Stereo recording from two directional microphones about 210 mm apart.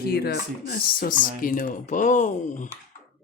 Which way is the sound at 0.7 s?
40° left (ahead or behind).